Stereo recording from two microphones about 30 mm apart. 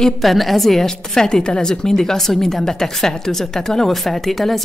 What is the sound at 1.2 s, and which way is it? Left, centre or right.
Speech, left.